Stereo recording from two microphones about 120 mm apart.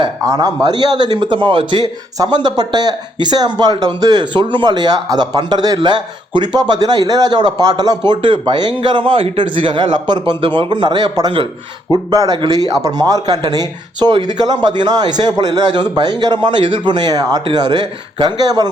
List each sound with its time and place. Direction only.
0.0 s speech: 30° right (ahead or behind)